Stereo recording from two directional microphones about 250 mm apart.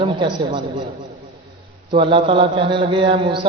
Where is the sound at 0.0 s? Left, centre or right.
Centre.